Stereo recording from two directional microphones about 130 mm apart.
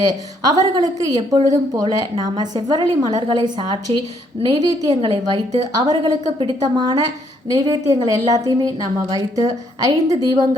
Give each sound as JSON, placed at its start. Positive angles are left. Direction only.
{"t": 0.0, "sound": "a woman's voice", "side_deg": -30}